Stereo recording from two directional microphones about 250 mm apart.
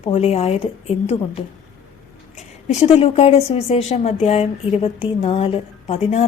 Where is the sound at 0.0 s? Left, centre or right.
Left.